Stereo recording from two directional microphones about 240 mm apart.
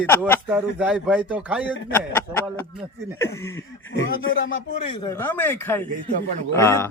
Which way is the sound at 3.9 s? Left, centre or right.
Left.